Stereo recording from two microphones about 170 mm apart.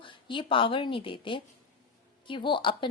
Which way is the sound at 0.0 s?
30° left (ahead or behind).